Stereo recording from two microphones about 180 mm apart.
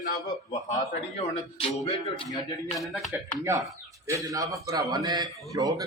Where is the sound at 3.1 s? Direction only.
15° right (ahead or behind).